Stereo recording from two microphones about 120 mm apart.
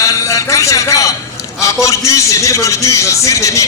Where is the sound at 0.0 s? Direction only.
25° left (ahead or behind).